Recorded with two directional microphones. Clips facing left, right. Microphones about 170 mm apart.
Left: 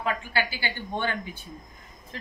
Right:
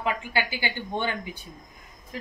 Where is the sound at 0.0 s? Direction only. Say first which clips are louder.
Right 1 dB; 15° right (ahead or behind).